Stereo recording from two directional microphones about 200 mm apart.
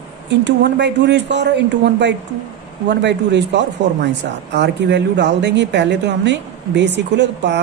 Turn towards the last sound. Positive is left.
turn(degrees=-60)  # may be behind; listen again after turning